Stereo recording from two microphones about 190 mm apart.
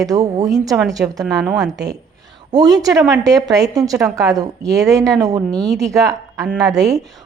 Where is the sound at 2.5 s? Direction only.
20° right (ahead or behind).